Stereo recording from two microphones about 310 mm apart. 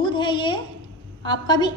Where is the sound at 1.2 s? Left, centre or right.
Centre.